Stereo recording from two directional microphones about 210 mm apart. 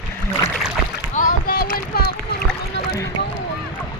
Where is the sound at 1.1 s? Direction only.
40° left (ahead or behind).